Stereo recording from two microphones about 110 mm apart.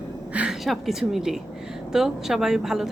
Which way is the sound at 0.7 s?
Centre (ahead or behind).